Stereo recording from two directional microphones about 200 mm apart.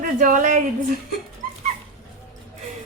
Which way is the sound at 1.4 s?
45° right (ahead or behind).